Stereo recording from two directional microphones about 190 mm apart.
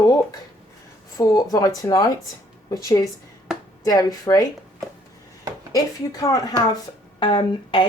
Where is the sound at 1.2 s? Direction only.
20° left (ahead or behind).